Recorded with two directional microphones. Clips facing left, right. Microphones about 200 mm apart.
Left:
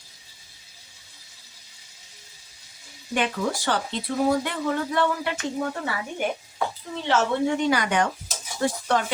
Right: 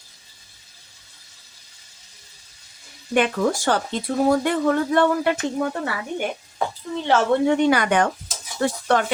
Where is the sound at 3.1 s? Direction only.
50° right (ahead or behind).